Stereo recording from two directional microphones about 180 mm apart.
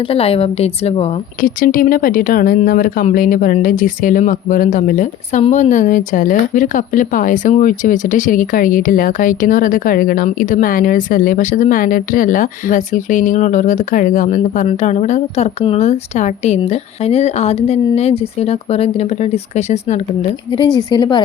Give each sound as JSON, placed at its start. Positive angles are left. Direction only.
{"t": 0.0, "sound": "a woman's voice", "side_deg": 30}
{"t": 1.4, "sound": "speech", "side_deg": 50}
{"t": 20.7, "sound": "a woman's voice", "side_deg": 25}